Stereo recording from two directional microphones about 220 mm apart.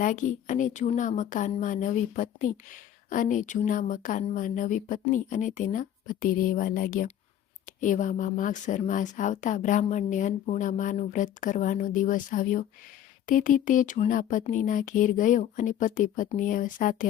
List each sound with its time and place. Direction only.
0.0 s speech: 35° left (ahead or behind)